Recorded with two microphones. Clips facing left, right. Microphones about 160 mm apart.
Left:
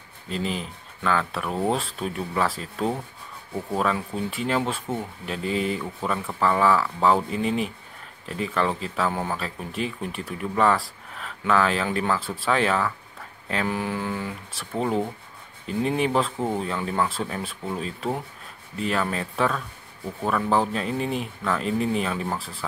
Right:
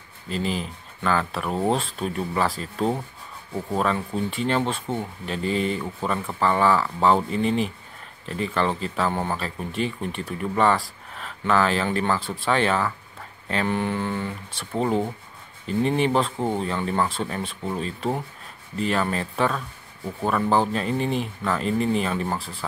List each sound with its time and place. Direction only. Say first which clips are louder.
0.3 s speech: right 2 dB; centre (ahead or behind)